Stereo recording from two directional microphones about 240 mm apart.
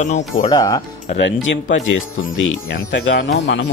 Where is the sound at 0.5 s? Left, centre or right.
Centre.